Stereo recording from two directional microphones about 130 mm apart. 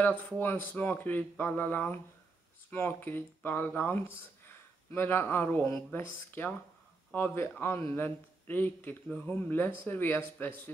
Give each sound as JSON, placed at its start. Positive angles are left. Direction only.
{"t": 0.0, "sound": "speech", "side_deg": 15}